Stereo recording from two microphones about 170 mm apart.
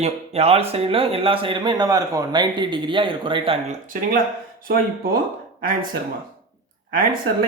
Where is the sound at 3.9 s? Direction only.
55° right (ahead or behind).